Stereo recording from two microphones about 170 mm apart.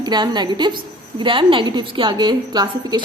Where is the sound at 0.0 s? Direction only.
25° right (ahead or behind).